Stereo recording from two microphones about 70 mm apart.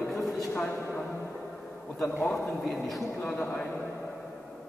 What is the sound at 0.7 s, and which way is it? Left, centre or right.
Speech, left.